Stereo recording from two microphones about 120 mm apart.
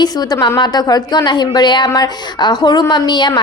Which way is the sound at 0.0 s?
35° left (ahead or behind).